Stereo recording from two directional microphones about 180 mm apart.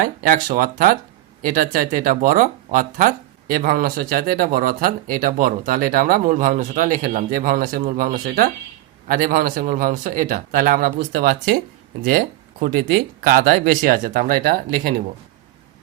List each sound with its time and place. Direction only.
0.0 s speech: 50° right (ahead or behind)